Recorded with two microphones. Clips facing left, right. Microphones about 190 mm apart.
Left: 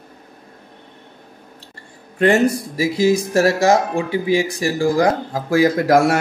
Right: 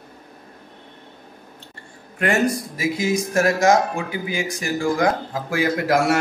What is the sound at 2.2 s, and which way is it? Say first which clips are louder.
Speech: left 5 dB; 30° left (ahead or behind).